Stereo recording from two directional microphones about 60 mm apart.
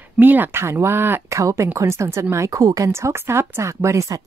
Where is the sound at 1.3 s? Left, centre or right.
Right.